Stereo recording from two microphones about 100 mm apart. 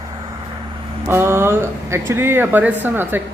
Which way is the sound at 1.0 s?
25° right (ahead or behind).